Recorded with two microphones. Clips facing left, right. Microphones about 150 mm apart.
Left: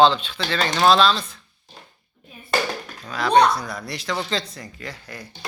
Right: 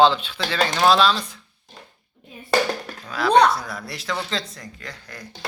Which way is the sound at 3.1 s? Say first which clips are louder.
Right 1 dB; 5° right (ahead or behind).